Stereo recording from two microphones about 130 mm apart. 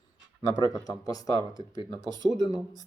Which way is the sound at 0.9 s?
30° left (ahead or behind).